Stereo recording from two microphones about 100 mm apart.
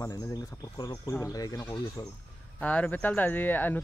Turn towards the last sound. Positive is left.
turn(degrees=20)  # may be behind; listen again after turning